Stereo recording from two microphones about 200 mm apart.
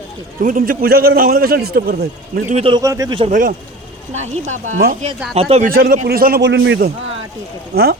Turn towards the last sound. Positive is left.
turn(degrees=-50)  # may be behind; listen again after turning